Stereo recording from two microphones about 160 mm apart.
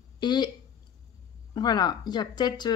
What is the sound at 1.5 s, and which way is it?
Speech, 25° left (ahead or behind).